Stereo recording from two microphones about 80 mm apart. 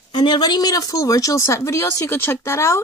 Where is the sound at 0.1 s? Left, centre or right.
Left.